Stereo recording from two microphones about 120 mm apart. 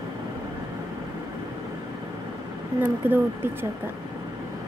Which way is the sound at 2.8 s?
15° right (ahead or behind).